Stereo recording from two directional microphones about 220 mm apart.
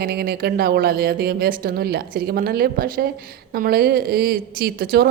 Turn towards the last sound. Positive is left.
turn(degrees=-45)  # may be behind; listen again after turning